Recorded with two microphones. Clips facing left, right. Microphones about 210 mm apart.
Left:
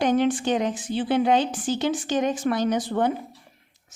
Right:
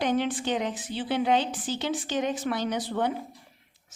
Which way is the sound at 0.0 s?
45° left (ahead or behind).